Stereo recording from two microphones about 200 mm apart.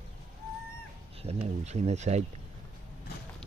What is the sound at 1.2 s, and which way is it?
Speech, 30° right (ahead or behind).